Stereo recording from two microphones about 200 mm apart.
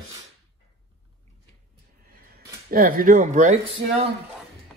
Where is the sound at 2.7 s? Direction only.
45° right (ahead or behind).